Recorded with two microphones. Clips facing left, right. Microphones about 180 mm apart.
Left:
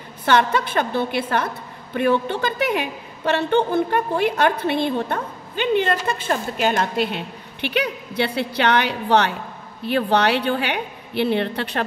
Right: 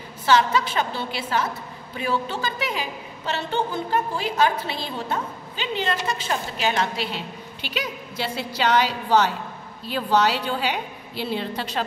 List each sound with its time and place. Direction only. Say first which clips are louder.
0.2 s a woman's voice: left 1 dB; 60° left (ahead or behind)